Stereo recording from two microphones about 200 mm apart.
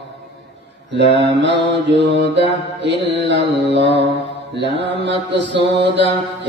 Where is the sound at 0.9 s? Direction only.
60° right (ahead or behind).